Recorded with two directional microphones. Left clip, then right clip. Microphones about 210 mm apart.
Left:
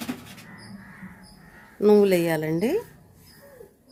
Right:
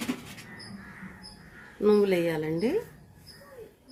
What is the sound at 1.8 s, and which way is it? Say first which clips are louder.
Speech: left 5 dB; 50° left (ahead or behind).